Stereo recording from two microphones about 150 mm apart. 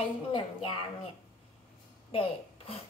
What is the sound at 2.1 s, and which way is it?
Speech, 40° left (ahead or behind).